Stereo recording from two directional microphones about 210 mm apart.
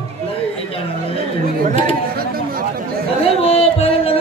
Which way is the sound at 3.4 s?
25° left (ahead or behind).